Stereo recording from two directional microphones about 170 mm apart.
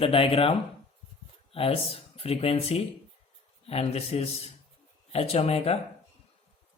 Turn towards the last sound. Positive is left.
turn(degrees=35)  # may be behind; listen again after turning